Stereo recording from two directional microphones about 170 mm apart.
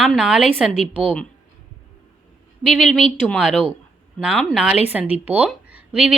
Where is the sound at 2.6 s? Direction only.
Centre (ahead or behind).